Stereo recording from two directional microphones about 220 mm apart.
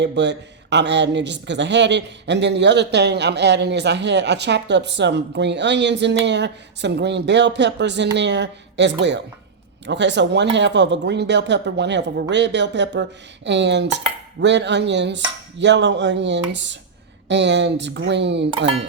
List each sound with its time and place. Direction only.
0.0 s a woman's voice: 50° right (ahead or behind)